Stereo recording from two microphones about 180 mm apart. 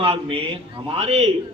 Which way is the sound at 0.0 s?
30° right (ahead or behind).